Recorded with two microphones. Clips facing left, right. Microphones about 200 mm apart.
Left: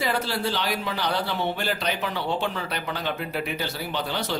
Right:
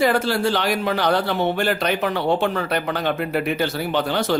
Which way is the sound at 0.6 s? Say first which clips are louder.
Right 7 dB; 75° right (ahead or behind).